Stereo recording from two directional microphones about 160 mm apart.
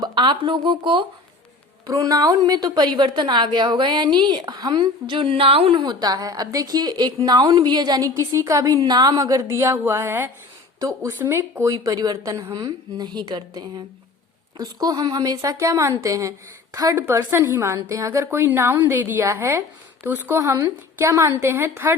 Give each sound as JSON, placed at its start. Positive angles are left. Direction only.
{"t": 0.0, "sound": "a woman's voice", "side_deg": -30}